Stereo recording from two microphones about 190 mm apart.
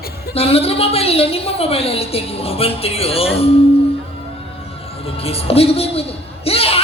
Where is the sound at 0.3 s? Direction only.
30° left (ahead or behind).